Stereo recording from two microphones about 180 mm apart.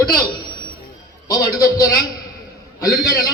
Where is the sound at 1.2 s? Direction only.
20° left (ahead or behind).